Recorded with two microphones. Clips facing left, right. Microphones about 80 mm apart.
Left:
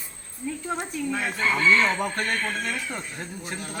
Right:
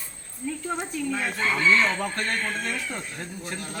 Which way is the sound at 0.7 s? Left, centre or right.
Centre.